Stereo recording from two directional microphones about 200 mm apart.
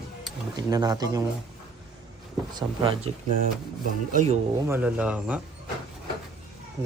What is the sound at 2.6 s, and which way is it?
Speech, 25° right (ahead or behind).